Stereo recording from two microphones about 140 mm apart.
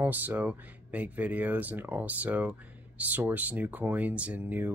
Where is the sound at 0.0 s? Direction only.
15° right (ahead or behind).